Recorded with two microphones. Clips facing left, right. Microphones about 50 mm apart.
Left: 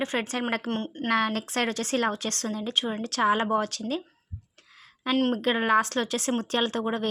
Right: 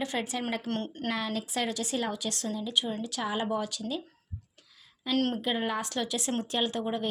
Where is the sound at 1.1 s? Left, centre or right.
Left.